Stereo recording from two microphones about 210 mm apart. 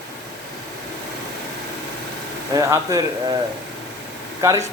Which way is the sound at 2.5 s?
15° right (ahead or behind).